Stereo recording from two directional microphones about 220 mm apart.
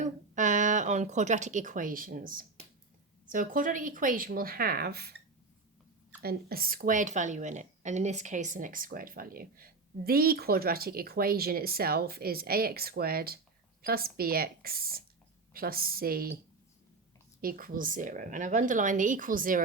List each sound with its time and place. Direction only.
0.0 s a woman's voice: 35° right (ahead or behind)
6.2 s a woman's voice: 45° right (ahead or behind)
17.4 s speech: 40° right (ahead or behind)